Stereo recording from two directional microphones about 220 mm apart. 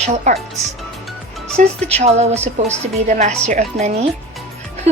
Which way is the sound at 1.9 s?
30° right (ahead or behind).